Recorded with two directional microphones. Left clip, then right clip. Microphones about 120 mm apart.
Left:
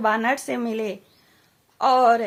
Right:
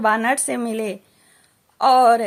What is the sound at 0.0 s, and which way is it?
A woman's voice, 30° right (ahead or behind).